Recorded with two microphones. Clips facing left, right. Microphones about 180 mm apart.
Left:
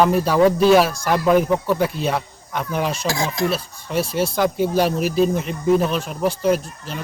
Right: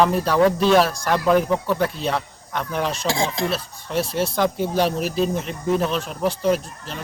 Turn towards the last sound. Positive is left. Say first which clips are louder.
# left 1 dB
turn(degrees=5)  # may be behind; listen again after turning